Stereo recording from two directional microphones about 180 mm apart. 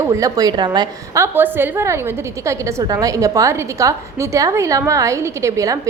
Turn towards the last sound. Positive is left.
turn(degrees=-20)  # may be behind; listen again after turning